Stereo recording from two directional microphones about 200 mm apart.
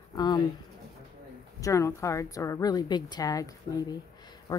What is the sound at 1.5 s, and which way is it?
A woman's voice, 15° left (ahead or behind).